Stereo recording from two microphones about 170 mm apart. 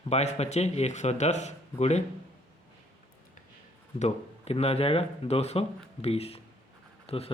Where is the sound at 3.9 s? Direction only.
40° left (ahead or behind).